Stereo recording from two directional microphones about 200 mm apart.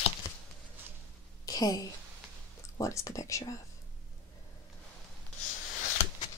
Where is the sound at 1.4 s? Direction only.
20° left (ahead or behind).